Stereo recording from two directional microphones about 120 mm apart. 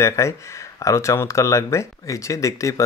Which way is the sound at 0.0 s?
25° left (ahead or behind).